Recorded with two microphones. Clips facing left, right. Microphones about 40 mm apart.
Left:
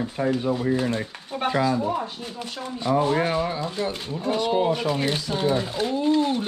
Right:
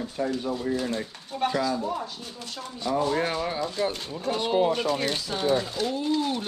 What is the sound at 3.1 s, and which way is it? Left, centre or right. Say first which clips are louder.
Speech: left 3 dB; centre.